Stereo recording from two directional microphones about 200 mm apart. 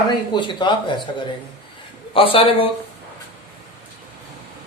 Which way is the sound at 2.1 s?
25° left (ahead or behind).